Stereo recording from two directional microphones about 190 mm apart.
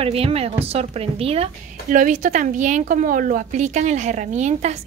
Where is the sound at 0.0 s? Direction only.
30° right (ahead or behind).